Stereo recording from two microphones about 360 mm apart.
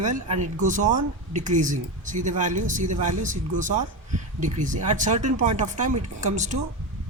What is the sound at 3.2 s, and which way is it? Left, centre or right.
Speech, right.